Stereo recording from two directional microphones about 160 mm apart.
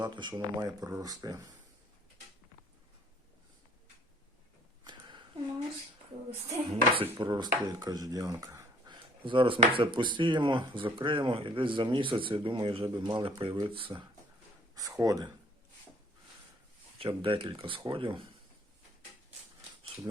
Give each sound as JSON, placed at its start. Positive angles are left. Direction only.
{"t": 0.0, "sound": "speech", "side_deg": -30}
{"t": 4.8, "sound": "a sound", "side_deg": -25}
{"t": 6.9, "sound": "speech", "side_deg": -30}
{"t": 14.8, "sound": "speech", "side_deg": -20}
{"t": 17.0, "sound": "speech", "side_deg": -35}